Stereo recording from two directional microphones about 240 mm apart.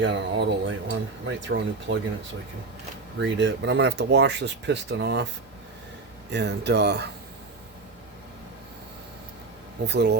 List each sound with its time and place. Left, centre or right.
0.0 s speech: right
3.2 s speech: right
6.3 s speech: right
9.8 s speech: right